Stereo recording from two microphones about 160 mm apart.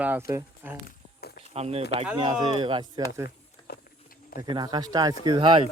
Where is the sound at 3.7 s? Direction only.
75° left (ahead or behind).